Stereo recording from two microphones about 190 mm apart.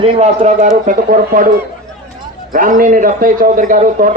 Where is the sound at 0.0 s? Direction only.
35° right (ahead or behind).